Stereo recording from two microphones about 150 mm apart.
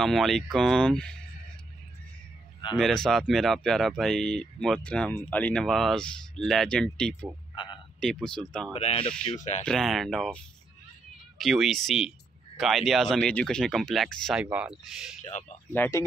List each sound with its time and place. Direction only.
0.0 s speech: centre (ahead or behind)
2.8 s speech: 5° left (ahead or behind)
7.5 s frog: 30° left (ahead or behind)
8.0 s speech: 5° left (ahead or behind)
8.7 s speech: 40° left (ahead or behind)
9.7 s speech: centre (ahead or behind)
14.4 s speech: 10° right (ahead or behind)
15.1 s speech: 50° left (ahead or behind)
15.7 s speech: 15° left (ahead or behind)